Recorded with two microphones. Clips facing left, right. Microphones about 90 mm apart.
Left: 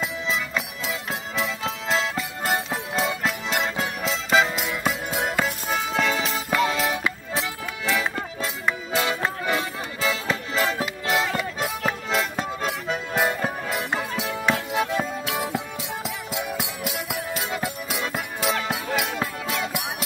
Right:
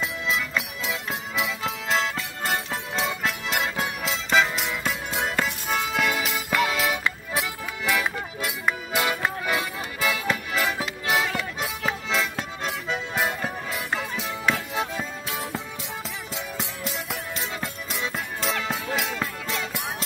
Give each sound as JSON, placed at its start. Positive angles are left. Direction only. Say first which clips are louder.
{"t": 0.0, "sound": "music", "louder": "even", "side_deg": 0}
{"t": 6.1, "sound": "music", "louder": "left 1 dB", "side_deg": 35}
{"t": 6.7, "sound": "music", "louder": "left 1 dB", "side_deg": 0}
{"t": 8.4, "sound": "music", "louder": "even", "side_deg": -10}
{"t": 9.6, "sound": "music", "louder": "left 1 dB", "side_deg": 25}
{"t": 10.5, "sound": "music", "louder": "left 2 dB", "side_deg": 35}
{"t": 11.6, "sound": "music", "louder": "left 2 dB", "side_deg": 50}
{"t": 13.2, "sound": "music", "louder": "left 5 dB", "side_deg": 65}
{"t": 16.3, "sound": "music", "louder": "left 4 dB", "side_deg": 10}